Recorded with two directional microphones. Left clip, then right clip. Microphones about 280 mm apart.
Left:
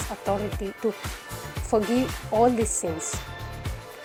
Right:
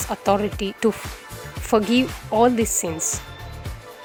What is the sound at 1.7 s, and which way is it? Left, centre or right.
Speech, right.